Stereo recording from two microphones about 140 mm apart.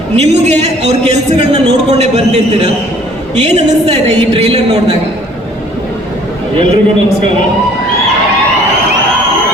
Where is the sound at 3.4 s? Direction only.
50° right (ahead or behind).